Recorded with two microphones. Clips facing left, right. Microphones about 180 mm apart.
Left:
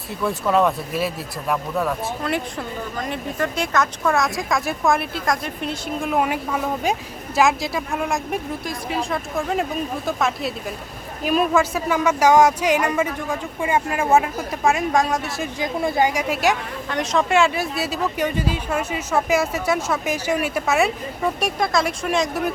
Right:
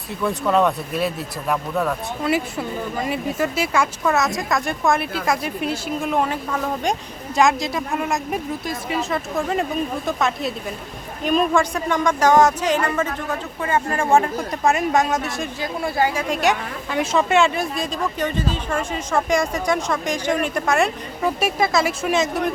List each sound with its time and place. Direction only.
0.2 s speech: centre (ahead or behind)
6.1 s speech: 10° left (ahead or behind)
15.6 s speech: 20° left (ahead or behind)
16.3 s speech: centre (ahead or behind)